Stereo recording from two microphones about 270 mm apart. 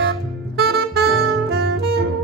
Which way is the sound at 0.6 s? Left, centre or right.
Right.